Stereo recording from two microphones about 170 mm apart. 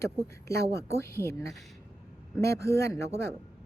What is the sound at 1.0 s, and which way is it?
Speech, 15° left (ahead or behind).